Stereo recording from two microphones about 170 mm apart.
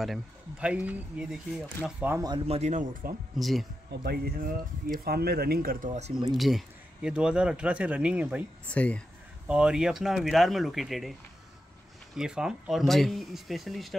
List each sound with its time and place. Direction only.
0.0 s speech: 5° right (ahead or behind)
2.2 s speech: 30° right (ahead or behind); by 3.2 s 55° right (ahead or behind)
3.3 s speech: centre (ahead or behind)
3.9 s speech: 70° right (ahead or behind)
5.0 s speech: 70° right (ahead or behind); by 6.1 s 45° right (ahead or behind)
6.3 s speech: centre (ahead or behind)
8.7 s speech: 10° left (ahead or behind)
9.5 s speech: 5° right (ahead or behind)
12.2 s speech: 5° right (ahead or behind)